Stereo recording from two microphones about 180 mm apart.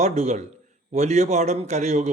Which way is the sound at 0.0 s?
40° right (ahead or behind).